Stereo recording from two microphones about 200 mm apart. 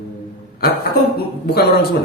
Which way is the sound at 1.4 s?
55° left (ahead or behind).